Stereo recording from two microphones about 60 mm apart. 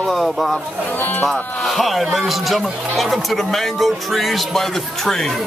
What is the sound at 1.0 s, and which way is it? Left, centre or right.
Speech, left.